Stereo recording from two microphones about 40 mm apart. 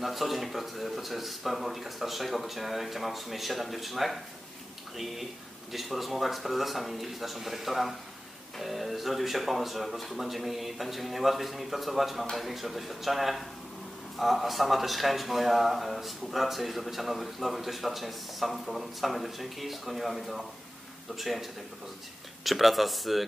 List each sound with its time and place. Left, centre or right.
0.0 s speech: centre